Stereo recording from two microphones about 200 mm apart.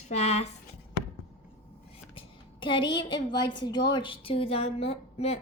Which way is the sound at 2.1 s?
25° left (ahead or behind).